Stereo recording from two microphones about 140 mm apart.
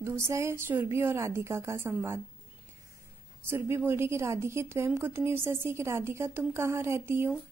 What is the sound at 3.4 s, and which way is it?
A woman's voice, 15° right (ahead or behind).